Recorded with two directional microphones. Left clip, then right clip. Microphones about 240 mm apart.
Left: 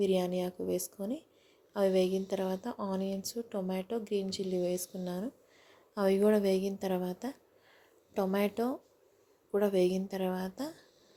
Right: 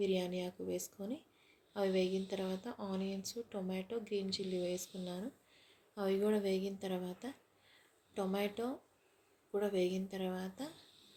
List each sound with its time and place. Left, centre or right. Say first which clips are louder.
0.0 s a woman's voice: left 6 dB; left